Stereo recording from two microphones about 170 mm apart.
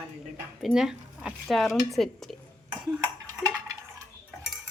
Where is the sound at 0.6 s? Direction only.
5° right (ahead or behind).